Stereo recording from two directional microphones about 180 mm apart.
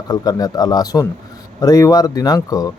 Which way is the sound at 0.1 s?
20° left (ahead or behind).